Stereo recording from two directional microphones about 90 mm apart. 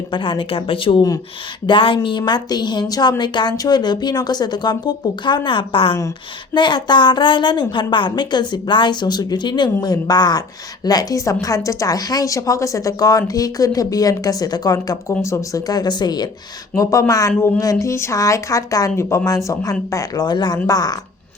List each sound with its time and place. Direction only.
0.1 s a woman's voice: 70° left (ahead or behind); by 6.0 s 85° left
6.5 s a woman's voice: 60° left (ahead or behind)
9.8 s a woman's voice: 50° left (ahead or behind)
16.7 s a woman's voice: 40° left (ahead or behind)